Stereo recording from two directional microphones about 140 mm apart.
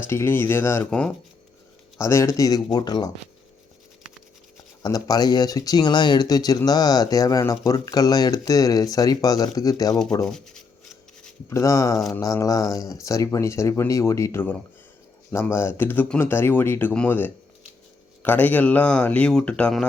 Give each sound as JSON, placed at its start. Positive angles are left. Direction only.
{"t": 0.1, "sound": "speech", "side_deg": 15}
{"t": 2.0, "sound": "speech", "side_deg": 20}
{"t": 4.8, "sound": "speech", "side_deg": 25}
{"t": 10.2, "sound": "speech", "side_deg": 5}
{"t": 11.4, "sound": "speech", "side_deg": 20}